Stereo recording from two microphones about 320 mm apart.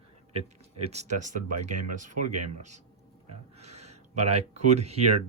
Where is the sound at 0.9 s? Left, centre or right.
Right.